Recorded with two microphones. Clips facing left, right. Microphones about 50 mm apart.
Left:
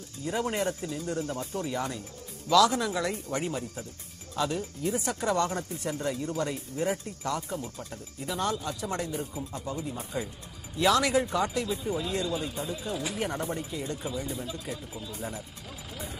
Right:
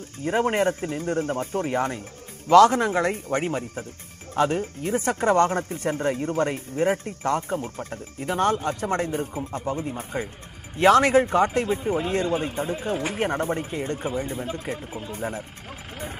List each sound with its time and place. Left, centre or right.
0.2 s speech: right